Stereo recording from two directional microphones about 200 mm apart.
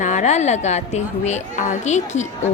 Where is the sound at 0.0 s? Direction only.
35° left (ahead or behind).